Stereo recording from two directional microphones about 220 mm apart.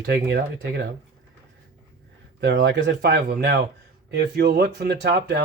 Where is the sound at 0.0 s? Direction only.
45° right (ahead or behind).